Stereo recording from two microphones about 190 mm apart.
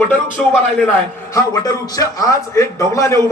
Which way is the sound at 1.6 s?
20° left (ahead or behind).